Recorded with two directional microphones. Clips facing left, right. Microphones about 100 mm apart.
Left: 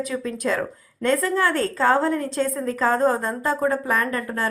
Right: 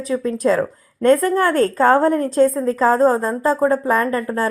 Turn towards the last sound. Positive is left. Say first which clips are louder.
# right 5 dB
turn(degrees=-35)  # may be behind; listen again after turning